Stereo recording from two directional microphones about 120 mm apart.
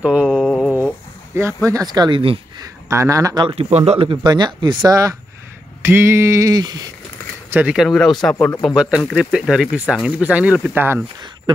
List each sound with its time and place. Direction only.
0.0 s mantra: 10° right (ahead or behind)
0.4 s mantra: 5° left (ahead or behind)
1.7 s speech: 30° right (ahead or behind)
2.6 s speech: 25° right (ahead or behind)
3.4 s speech: 60° right (ahead or behind)
4.1 s speech: 40° right (ahead or behind)
5.8 s a sound: 20° right (ahead or behind)
7.7 s speech: centre (ahead or behind)